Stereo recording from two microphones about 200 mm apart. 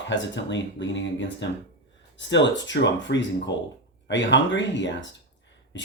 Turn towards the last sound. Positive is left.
turn(degrees=65)  # may be behind; listen again after turning